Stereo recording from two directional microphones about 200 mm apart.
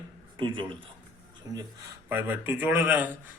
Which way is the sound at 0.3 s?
25° right (ahead or behind).